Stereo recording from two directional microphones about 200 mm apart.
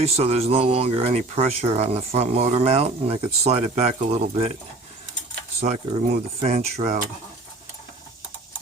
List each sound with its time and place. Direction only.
0.0 s speech: 30° right (ahead or behind)
5.5 s speech: 35° right (ahead or behind)